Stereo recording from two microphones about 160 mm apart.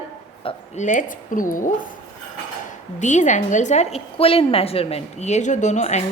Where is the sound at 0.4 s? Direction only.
35° left (ahead or behind).